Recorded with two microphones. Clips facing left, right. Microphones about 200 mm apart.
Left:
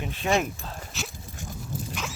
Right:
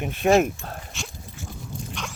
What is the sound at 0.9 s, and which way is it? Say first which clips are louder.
Dog: left 1 dB; centre (ahead or behind).